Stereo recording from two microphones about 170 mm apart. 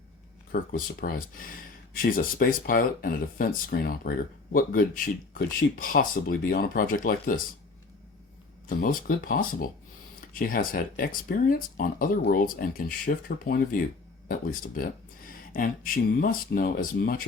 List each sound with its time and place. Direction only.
0.5 s speech: 55° left (ahead or behind)
8.8 s speech: 55° left (ahead or behind)